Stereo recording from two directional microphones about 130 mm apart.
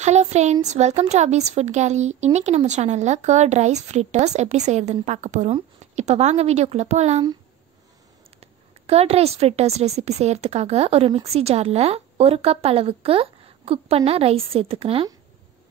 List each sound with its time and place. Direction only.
0.0 s a woman's voice: 60° right (ahead or behind)
5.5 s speech: 60° right (ahead or behind)
8.4 s a woman's voice: 50° right (ahead or behind)